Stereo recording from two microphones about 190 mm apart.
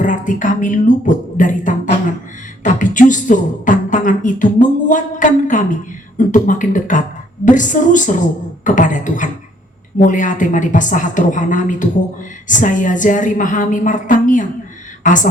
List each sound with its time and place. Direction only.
0.0 s beatboxing: 40° left (ahead or behind)
7.4 s a woman's voice: 40° left (ahead or behind)